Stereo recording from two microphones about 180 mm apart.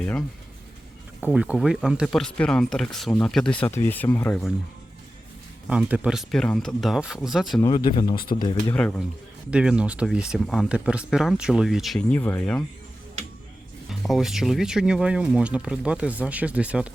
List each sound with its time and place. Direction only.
0.0 s speech: 10° left (ahead or behind)
1.2 s speech: 5° right (ahead or behind)
5.6 s speech: 5° right (ahead or behind)
7.6 s speech: 25° left (ahead or behind)
8.1 s speech: 55° left (ahead or behind)
8.7 s speech: 5° left (ahead or behind)
9.5 s speech: 5° right (ahead or behind)
14.0 s speech: centre (ahead or behind)